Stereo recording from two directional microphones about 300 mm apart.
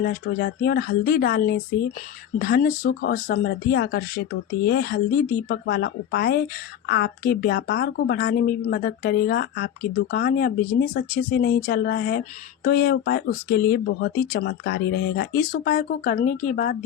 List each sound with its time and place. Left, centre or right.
0.0 s speech: left